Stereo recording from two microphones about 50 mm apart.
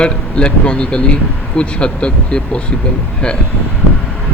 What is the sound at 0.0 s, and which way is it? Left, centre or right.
Speech, left.